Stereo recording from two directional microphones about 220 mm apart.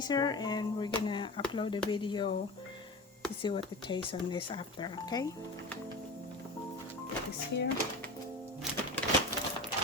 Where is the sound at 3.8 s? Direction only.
20° left (ahead or behind).